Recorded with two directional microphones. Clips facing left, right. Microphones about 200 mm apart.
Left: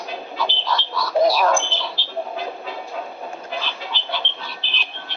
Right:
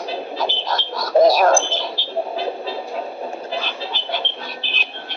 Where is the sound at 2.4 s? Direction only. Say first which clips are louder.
Right 5 dB; 30° right (ahead or behind).